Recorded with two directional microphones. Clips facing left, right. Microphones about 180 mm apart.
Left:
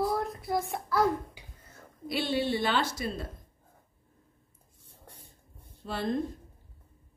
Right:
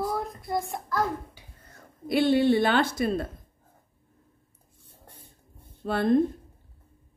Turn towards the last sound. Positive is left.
turn(degrees=-55)  # may be behind; listen again after turning